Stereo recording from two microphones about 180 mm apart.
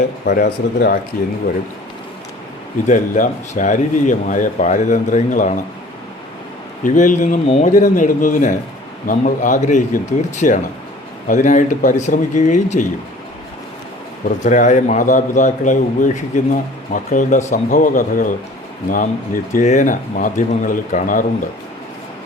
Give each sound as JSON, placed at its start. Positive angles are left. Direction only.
{"t": 0.3, "sound": "speech", "side_deg": 65}
{"t": 1.1, "sound": "a man's voice", "side_deg": 50}
{"t": 2.8, "sound": "a man's voice", "side_deg": 45}
{"t": 6.8, "sound": "a man's voice", "side_deg": 45}
{"t": 14.3, "sound": "a man's voice", "side_deg": 45}